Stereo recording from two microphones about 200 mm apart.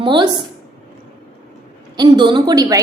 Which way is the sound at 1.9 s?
20° right (ahead or behind).